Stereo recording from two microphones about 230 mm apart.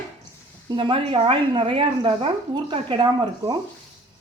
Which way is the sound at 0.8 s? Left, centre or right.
Right.